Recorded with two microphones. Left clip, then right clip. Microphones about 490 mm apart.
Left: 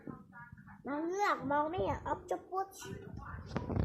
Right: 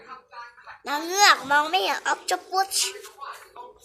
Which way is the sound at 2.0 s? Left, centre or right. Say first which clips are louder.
Right 12 dB; centre.